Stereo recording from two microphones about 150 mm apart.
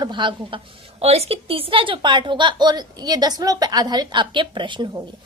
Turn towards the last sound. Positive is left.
turn(degrees=-35)  # may be behind; listen again after turning